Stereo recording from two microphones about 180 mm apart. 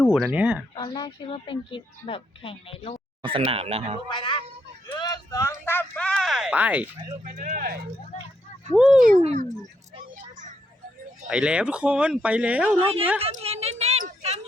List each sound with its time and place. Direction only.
0.0 s speech: centre (ahead or behind)
0.8 s speech: 25° left (ahead or behind)
3.2 s speech: 30° right (ahead or behind)
4.1 s speech: 25° left (ahead or behind)
4.9 s a sound: 20° left (ahead or behind); by 6.8 s 10° right (ahead or behind)
7.3 s speech: 45° right (ahead or behind)
8.7 s speech: 5° right (ahead or behind)
9.2 s speech: 40° right (ahead or behind)
11.3 s speech: 5° right (ahead or behind)
12.8 s speech: 30° right (ahead or behind)
13.1 s a sound: 35° right (ahead or behind)